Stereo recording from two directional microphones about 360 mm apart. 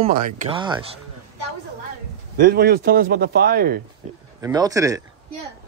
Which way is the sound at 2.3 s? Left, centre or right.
Right.